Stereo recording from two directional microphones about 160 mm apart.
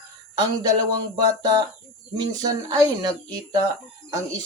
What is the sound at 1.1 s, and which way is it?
Speech, 25° right (ahead or behind).